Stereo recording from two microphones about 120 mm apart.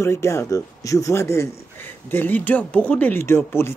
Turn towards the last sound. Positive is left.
turn(degrees=20)  # may be behind; listen again after turning